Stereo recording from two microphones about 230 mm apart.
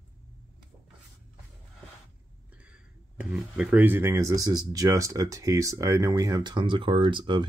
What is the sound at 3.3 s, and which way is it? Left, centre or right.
Speech, centre.